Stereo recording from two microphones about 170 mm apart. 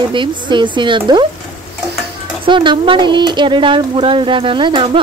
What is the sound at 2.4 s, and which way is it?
Speech, 30° right (ahead or behind).